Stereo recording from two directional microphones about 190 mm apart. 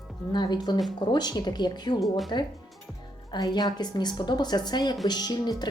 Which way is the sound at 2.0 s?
Centre (ahead or behind).